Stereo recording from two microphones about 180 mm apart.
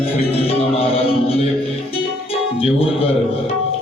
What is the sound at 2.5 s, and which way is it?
Speech, 30° left (ahead or behind).